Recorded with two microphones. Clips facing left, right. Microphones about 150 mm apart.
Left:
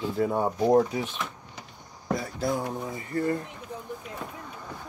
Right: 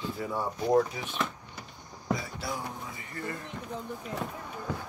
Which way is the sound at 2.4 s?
40° left (ahead or behind).